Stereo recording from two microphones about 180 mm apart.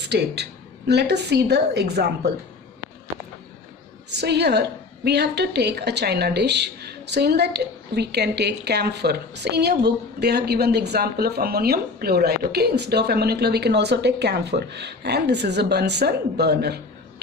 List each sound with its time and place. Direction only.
0.1 s a woman's voice: 70° right (ahead or behind)
4.1 s a woman's voice: 65° right (ahead or behind)